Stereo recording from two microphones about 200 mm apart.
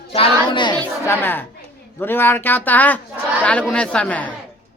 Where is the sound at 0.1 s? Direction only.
25° left (ahead or behind).